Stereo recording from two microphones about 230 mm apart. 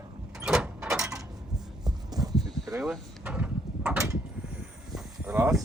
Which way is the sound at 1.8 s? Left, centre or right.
Centre.